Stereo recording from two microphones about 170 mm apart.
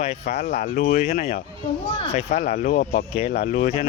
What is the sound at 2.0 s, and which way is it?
Speech, 40° left (ahead or behind).